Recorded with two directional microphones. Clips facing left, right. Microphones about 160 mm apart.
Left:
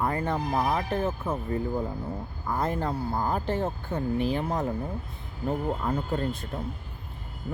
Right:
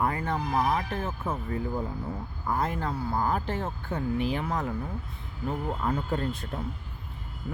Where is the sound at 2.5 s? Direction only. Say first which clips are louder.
Left 2 dB; 40° left (ahead or behind).